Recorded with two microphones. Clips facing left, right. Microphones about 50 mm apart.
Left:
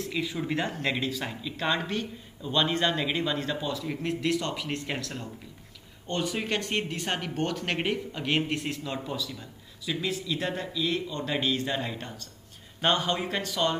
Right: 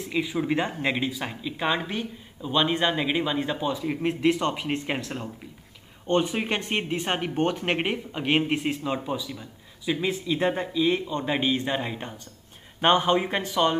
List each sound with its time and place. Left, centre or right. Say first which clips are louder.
0.0 s speech: right 4 dB; centre